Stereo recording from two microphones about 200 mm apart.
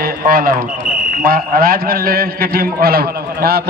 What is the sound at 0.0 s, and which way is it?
A man's voice, 45° right (ahead or behind).